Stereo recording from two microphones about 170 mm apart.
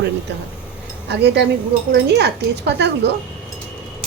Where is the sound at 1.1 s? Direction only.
90° right.